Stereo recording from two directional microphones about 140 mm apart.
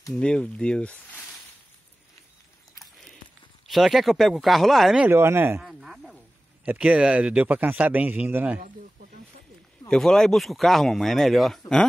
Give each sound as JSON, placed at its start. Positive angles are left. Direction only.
{"t": 0.1, "sound": "speech", "side_deg": 5}
{"t": 3.6, "sound": "speech", "side_deg": 0}
{"t": 5.0, "sound": "speech", "side_deg": -15}
{"t": 5.6, "sound": "a sound", "side_deg": -5}
{"t": 6.7, "sound": "speech", "side_deg": -10}
{"t": 9.8, "sound": "speech", "side_deg": 5}